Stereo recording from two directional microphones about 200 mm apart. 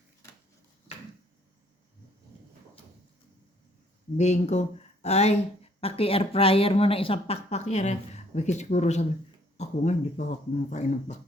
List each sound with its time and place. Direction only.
4.2 s speech: 35° left (ahead or behind)